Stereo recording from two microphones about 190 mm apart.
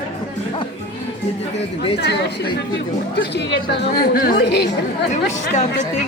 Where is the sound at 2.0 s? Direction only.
60° left (ahead or behind).